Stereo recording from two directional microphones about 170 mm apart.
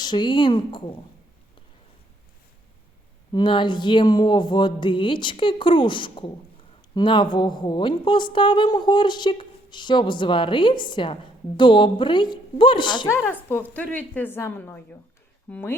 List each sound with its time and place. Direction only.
0.0 s a woman's voice: 25° left (ahead or behind)
3.3 s a woman's voice: 25° left (ahead or behind)
13.1 s a woman's voice: 10° left (ahead or behind)